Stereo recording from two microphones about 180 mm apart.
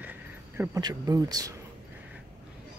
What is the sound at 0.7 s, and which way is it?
Speech, 20° right (ahead or behind).